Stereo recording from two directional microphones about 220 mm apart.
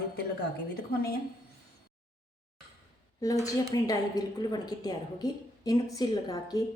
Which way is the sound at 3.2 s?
15° left (ahead or behind).